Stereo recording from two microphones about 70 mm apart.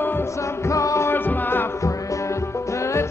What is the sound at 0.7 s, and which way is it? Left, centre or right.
Music, left.